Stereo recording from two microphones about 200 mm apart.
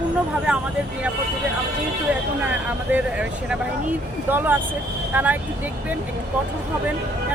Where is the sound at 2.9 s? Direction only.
5° right (ahead or behind).